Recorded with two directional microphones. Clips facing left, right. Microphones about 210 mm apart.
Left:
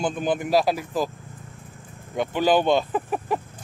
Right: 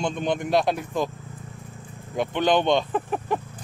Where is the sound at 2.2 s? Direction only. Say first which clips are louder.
Left 1 dB; 5° left (ahead or behind).